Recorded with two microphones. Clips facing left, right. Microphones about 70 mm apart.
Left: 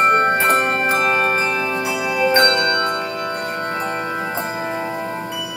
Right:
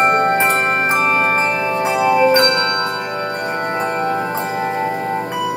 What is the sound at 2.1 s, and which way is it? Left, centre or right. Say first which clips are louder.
Music: right 3 dB; right.